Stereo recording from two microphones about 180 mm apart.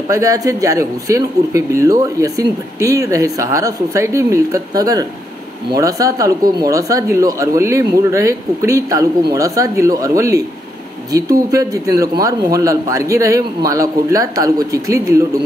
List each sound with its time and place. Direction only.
0.1 s speech: 20° right (ahead or behind)